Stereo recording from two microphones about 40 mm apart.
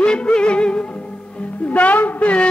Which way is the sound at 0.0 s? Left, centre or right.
Left.